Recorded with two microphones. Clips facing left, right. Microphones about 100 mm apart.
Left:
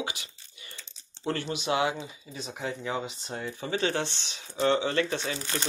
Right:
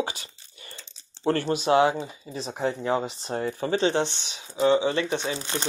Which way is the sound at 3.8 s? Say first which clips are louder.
Right 3 dB; 20° right (ahead or behind).